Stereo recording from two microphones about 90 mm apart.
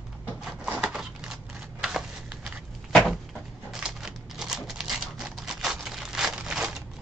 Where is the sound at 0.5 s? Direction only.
5° right (ahead or behind).